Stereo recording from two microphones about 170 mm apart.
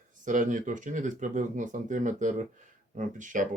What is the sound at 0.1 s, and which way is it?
Speech, 50° right (ahead or behind).